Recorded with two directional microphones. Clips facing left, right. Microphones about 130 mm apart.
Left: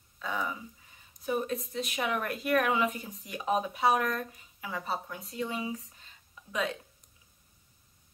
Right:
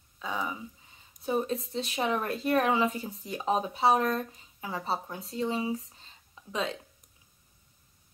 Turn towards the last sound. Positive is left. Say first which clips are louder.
# even
turn(degrees=-30)  # may be behind; listen again after turning